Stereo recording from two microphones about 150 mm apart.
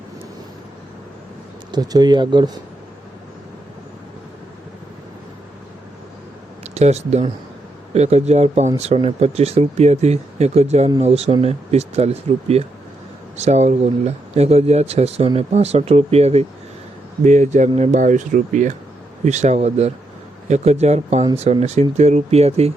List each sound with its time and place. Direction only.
1.7 s speech: 25° right (ahead or behind)
6.7 s speech: 45° right (ahead or behind)